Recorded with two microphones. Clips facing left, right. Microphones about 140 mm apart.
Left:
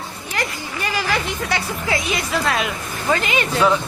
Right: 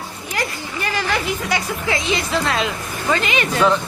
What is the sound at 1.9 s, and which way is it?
A woman's voice, 25° right (ahead or behind).